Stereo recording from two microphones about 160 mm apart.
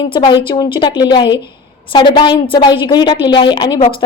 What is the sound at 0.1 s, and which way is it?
Speech, 30° left (ahead or behind).